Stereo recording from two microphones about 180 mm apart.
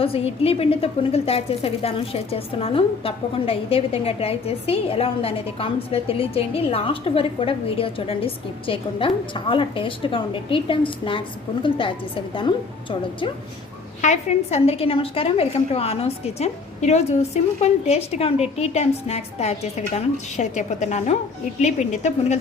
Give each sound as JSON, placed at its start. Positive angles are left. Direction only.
{"t": 0.0, "sound": "a woman's voice", "side_deg": 35}
{"t": 14.0, "sound": "a woman's voice", "side_deg": 40}